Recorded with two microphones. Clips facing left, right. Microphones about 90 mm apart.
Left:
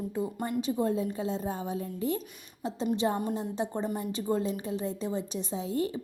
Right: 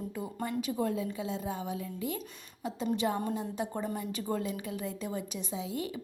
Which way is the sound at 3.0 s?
25° left (ahead or behind).